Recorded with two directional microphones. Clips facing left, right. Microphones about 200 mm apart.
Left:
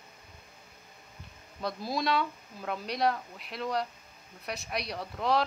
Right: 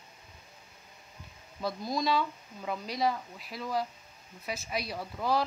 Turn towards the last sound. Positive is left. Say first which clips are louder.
# left 1 dB
turn(degrees=0)  # may be behind; listen again after turning